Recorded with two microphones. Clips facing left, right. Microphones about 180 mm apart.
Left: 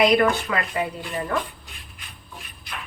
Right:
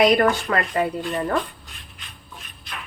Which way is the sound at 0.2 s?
45° right (ahead or behind).